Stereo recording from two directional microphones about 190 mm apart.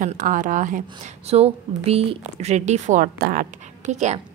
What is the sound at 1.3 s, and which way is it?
A woman's voice, 35° right (ahead or behind).